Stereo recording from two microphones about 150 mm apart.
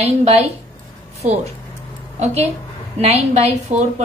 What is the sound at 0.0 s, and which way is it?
A woman's voice, 45° right (ahead or behind).